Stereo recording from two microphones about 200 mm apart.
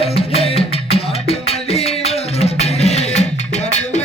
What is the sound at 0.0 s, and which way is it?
Music, 30° left (ahead or behind).